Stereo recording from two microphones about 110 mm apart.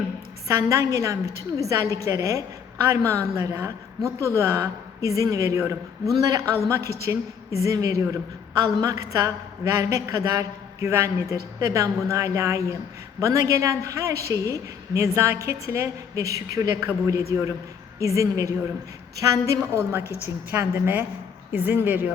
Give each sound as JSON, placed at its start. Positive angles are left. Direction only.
{"t": 0.4, "sound": "a woman's voice", "side_deg": -30}
{"t": 20.1, "sound": "a woman's voice", "side_deg": 25}
{"t": 20.5, "sound": "speech", "side_deg": -20}